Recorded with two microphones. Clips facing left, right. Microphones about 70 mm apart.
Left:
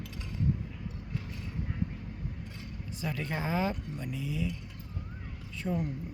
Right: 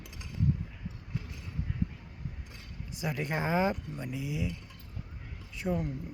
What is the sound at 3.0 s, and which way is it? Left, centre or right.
Speech, centre.